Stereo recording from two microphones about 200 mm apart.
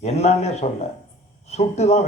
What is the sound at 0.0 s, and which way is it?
A man's voice, 35° left (ahead or behind).